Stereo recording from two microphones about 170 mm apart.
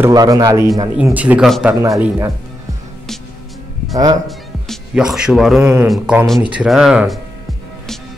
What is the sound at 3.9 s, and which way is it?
Speech, 20° right (ahead or behind).